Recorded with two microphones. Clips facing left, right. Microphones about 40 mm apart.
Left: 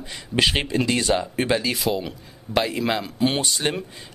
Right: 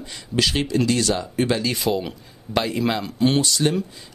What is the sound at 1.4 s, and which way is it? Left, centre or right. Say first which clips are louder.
Speech: even; centre.